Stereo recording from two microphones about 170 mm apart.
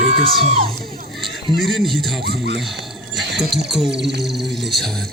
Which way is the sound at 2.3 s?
90° right.